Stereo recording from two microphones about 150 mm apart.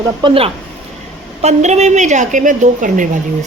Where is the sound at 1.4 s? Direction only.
50° right (ahead or behind).